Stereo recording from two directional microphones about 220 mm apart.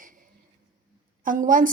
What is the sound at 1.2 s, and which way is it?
Speech, 40° right (ahead or behind).